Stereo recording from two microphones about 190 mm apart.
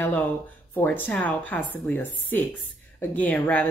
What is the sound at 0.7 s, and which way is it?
Speech, 10° left (ahead or behind).